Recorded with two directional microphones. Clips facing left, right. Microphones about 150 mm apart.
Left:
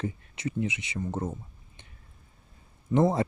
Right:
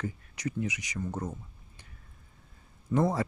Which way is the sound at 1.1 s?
25° left (ahead or behind).